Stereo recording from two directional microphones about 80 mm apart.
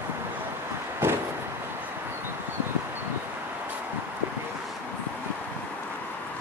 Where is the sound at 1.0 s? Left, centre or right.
Right.